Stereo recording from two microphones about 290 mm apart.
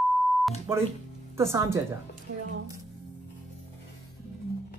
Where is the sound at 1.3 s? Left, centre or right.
Centre.